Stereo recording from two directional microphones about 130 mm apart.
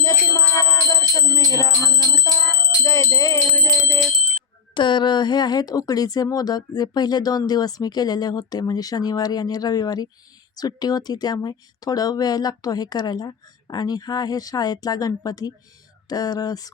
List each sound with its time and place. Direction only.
0.1 s music: 25° left (ahead or behind)
4.7 s speech: 35° left (ahead or behind)
16.0 s music: 30° left (ahead or behind)